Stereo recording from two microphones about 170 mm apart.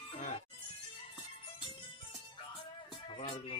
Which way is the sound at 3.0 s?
30° left (ahead or behind).